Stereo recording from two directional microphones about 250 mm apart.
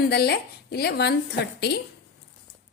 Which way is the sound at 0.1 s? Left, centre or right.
Left.